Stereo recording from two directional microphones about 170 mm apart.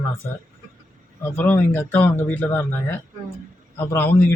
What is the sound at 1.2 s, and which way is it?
Speech, 10° left (ahead or behind).